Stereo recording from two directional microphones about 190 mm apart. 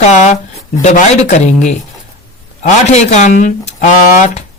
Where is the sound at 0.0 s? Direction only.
40° left (ahead or behind).